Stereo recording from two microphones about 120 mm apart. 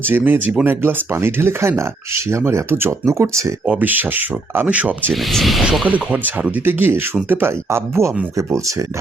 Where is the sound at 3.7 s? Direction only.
15° right (ahead or behind).